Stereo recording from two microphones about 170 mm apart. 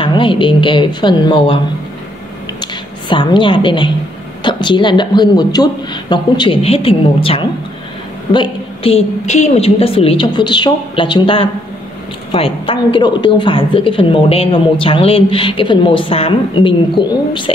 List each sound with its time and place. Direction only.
0.0 s speech: 30° left (ahead or behind)
2.6 s a woman's voice: 30° left (ahead or behind)